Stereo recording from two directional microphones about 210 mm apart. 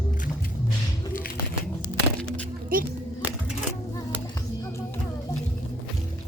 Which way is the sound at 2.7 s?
45° right (ahead or behind).